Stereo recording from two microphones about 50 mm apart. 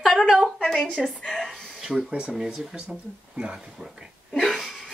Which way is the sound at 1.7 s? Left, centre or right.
Centre.